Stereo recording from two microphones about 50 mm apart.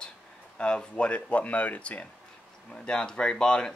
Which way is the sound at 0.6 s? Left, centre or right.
Centre.